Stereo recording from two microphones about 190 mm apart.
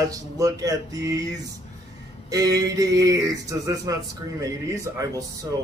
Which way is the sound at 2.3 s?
20° right (ahead or behind).